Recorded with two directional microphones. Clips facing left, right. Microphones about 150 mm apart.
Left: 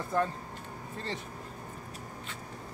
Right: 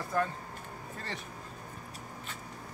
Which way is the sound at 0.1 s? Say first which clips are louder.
Left 2 dB; 25° left (ahead or behind).